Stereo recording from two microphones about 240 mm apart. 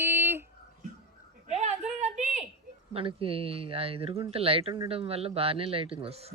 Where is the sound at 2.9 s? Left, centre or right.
Right.